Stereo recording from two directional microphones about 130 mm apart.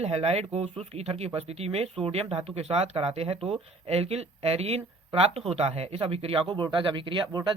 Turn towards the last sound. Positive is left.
turn(degrees=-35)  # may be behind; listen again after turning